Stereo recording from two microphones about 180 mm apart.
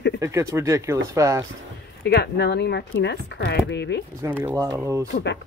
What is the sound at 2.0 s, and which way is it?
Speech, 70° left (ahead or behind).